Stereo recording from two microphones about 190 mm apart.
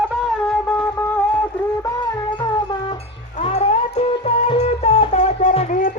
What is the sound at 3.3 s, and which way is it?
Music, 35° left (ahead or behind).